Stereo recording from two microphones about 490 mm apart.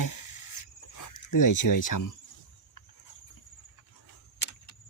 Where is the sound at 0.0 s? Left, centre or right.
Left.